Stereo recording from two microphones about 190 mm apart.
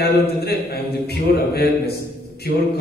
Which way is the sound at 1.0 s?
55° left (ahead or behind).